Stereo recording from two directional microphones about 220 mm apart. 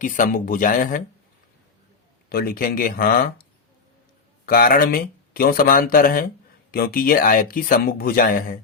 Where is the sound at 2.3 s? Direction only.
45° left (ahead or behind).